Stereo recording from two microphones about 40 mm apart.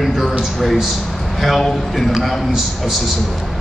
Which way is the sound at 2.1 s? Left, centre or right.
Centre.